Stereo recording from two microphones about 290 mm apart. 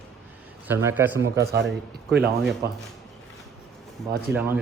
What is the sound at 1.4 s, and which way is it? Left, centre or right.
Speech, right.